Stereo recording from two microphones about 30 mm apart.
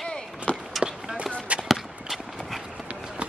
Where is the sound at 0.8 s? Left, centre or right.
Right.